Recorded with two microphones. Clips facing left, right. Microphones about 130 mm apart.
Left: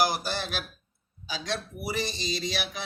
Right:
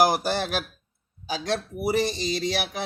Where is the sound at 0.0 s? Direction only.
60° right (ahead or behind).